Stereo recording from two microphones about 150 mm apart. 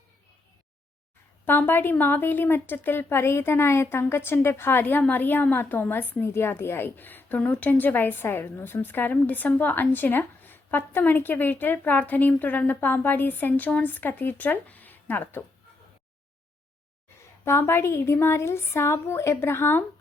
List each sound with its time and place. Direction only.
1.5 s speech: 15° left (ahead or behind)
17.4 s speech: 15° left (ahead or behind)